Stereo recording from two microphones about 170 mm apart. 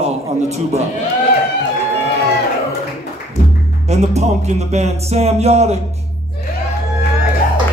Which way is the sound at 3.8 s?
40° right (ahead or behind).